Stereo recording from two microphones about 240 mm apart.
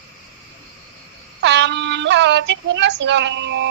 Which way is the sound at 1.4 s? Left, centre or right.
Right.